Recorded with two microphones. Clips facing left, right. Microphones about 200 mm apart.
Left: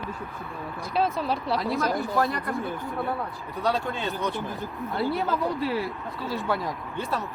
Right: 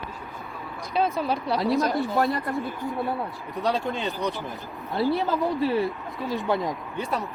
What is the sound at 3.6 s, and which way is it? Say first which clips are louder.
Speech: right 1 dB; 20° right (ahead or behind).